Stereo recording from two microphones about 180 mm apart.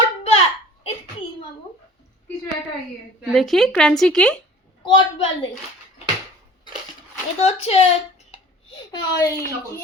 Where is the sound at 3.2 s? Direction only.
Centre (ahead or behind).